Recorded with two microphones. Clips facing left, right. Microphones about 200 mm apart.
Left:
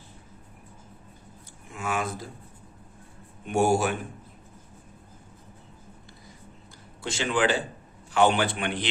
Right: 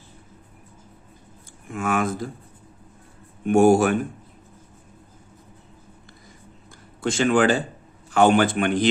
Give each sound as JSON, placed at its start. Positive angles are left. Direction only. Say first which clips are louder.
{"t": 1.7, "sound": "speech", "louder": "right 6 dB", "side_deg": -50}
{"t": 3.4, "sound": "speech", "louder": "right 7 dB", "side_deg": -50}
{"t": 7.0, "sound": "speech", "louder": "right 7 dB", "side_deg": -50}